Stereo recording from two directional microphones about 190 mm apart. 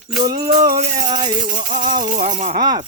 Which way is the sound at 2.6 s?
20° right (ahead or behind).